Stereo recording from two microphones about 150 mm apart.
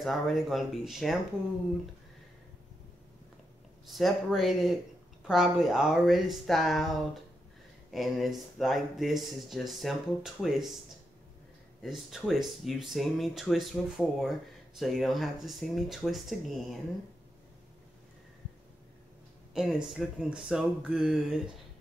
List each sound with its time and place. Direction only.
0.0 s speech: centre (ahead or behind)
3.8 s speech: centre (ahead or behind)
11.8 s speech: centre (ahead or behind)
19.5 s speech: 5° right (ahead or behind)